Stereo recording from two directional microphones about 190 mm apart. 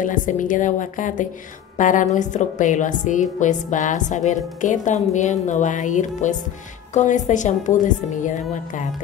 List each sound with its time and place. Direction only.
0.0 s a woman's voice: 45° left (ahead or behind)